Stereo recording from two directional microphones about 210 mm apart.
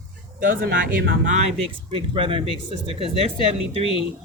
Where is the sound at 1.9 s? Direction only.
25° right (ahead or behind).